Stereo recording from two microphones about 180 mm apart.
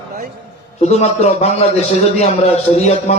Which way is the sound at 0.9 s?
35° left (ahead or behind).